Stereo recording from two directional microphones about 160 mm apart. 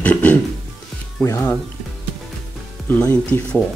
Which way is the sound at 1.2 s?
15° left (ahead or behind).